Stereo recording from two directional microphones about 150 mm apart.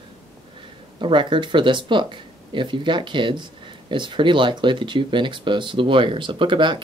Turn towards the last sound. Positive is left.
turn(degrees=-30)  # may be behind; listen again after turning